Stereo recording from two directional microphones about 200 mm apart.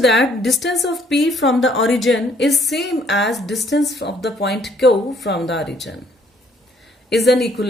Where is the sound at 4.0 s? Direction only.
60° left (ahead or behind).